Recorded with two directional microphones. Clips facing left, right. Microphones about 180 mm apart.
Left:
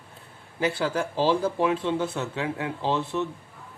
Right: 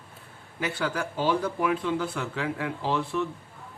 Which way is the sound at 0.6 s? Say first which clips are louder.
Left 4 dB; 25° left (ahead or behind).